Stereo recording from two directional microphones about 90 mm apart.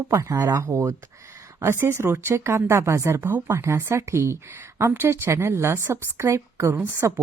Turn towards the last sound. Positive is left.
turn(degrees=-30)  # may be behind; listen again after turning